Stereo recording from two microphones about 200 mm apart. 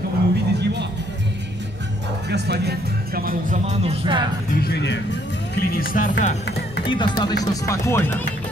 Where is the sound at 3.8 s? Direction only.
30° right (ahead or behind).